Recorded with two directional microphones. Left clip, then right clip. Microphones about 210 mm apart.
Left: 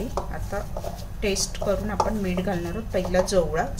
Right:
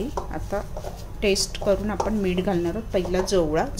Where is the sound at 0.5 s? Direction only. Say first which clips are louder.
Right 1 dB; 35° right (ahead or behind).